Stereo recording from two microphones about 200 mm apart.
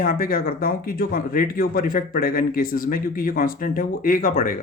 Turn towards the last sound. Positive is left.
turn(degrees=45)  # may be behind; listen again after turning